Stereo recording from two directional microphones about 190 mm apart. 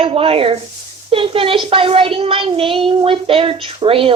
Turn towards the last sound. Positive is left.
turn(degrees=-30)  # may be behind; listen again after turning